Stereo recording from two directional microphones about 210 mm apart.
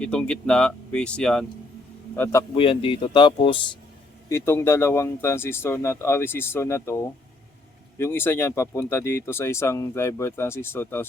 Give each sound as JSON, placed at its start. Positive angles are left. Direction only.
{"t": 0.0, "sound": "speech", "side_deg": 5}
{"t": 2.6, "sound": "speech", "side_deg": 25}
{"t": 4.3, "sound": "speech", "side_deg": 10}